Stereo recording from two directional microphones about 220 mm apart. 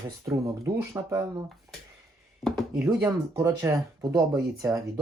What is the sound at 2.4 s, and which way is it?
Speech, centre (ahead or behind).